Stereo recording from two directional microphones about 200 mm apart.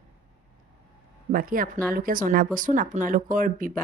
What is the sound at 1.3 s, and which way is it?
Speech, 45° right (ahead or behind).